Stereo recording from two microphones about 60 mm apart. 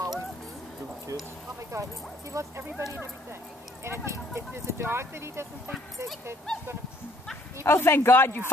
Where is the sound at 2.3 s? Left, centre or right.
Right.